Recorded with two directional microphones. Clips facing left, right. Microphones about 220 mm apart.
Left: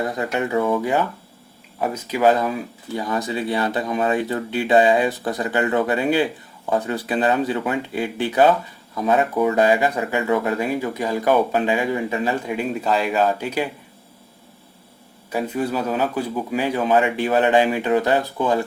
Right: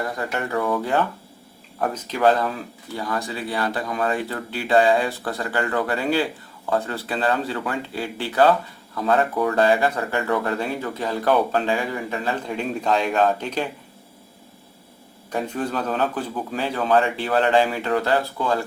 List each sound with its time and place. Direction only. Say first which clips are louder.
0.0 s speech: left 4 dB; 20° left (ahead or behind)
15.3 s speech: left 3 dB; 5° left (ahead or behind)